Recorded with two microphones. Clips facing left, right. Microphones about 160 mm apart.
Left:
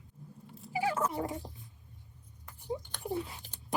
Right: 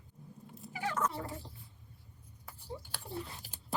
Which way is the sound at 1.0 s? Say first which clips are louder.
Left 3 dB; 15° left (ahead or behind).